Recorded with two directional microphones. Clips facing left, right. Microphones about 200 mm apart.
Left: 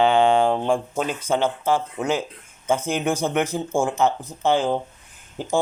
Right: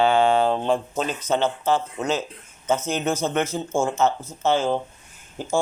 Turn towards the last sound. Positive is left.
turn(degrees=15)  # may be behind; listen again after turning